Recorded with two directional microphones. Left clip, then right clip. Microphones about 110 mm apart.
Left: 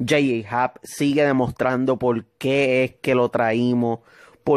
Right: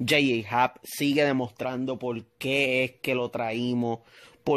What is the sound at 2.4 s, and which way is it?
Speech, 35° left (ahead or behind).